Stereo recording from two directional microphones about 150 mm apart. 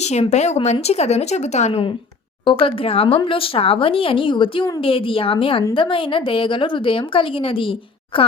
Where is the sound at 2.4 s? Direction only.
35° left (ahead or behind).